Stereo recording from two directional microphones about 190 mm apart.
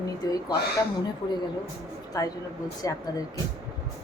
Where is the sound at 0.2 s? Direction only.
20° left (ahead or behind).